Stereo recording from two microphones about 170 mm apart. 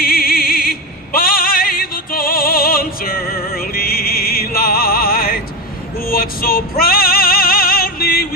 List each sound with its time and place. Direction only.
0.0 s music: 60° left (ahead or behind)